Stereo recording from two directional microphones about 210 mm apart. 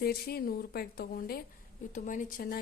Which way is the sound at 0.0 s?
45° left (ahead or behind).